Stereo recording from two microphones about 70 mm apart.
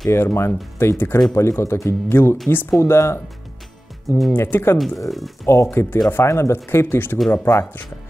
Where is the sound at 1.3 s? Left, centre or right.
Left.